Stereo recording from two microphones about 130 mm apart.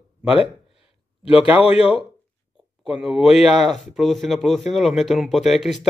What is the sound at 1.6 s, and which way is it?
Speech, 50° left (ahead or behind).